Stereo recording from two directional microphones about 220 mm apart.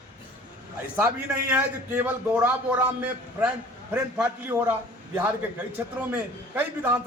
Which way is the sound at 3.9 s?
10° right (ahead or behind).